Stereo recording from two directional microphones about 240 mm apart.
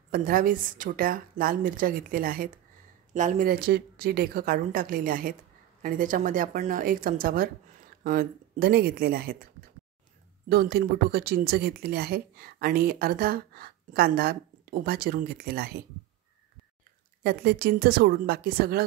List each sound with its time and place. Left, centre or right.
0.1 s speech: right
17.2 s speech: right